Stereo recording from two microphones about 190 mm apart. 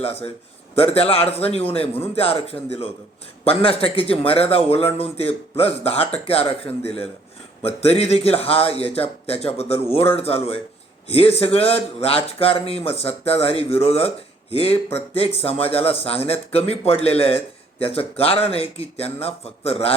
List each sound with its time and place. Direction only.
0.8 s a man's voice: 30° left (ahead or behind)